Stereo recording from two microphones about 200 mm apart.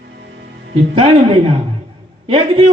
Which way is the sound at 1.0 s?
25° right (ahead or behind).